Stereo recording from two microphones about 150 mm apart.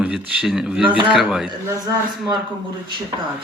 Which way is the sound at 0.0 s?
5° right (ahead or behind).